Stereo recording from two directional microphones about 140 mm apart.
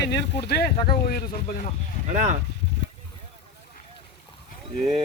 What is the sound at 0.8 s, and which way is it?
Speech, 90° left.